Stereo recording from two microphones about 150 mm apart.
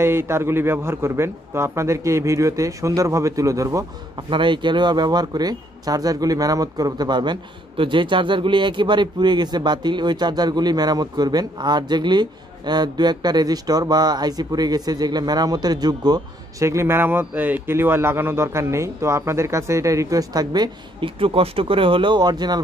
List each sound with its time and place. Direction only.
0.0 s speech: 15° right (ahead or behind)
4.3 s speech: 35° right (ahead or behind)